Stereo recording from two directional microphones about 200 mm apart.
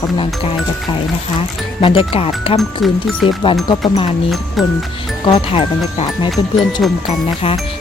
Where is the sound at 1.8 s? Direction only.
25° left (ahead or behind).